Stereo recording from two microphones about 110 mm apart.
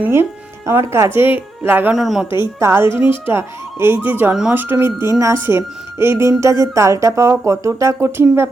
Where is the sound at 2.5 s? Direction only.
25° right (ahead or behind).